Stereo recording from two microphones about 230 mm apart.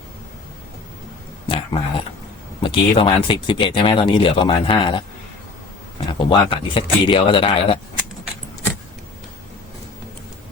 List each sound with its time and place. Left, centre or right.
1.5 s speech: left
6.1 s speech: left